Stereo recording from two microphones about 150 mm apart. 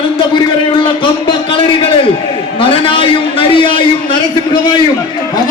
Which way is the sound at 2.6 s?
35° left (ahead or behind).